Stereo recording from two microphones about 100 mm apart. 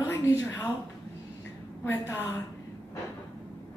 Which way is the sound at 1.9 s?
20° left (ahead or behind).